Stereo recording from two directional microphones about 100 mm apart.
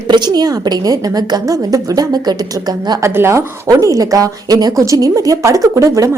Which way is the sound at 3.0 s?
25° right (ahead or behind).